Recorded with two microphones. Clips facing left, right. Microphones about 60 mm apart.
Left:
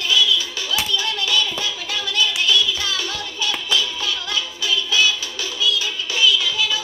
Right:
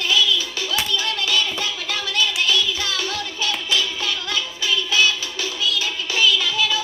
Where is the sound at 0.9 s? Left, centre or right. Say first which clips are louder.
Left 1 dB; right.